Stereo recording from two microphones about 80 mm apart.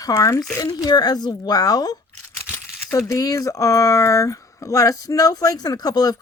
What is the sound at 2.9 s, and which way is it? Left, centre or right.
Speech, left.